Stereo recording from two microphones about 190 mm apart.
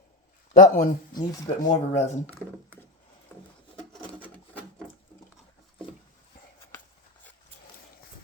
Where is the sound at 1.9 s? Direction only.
35° left (ahead or behind).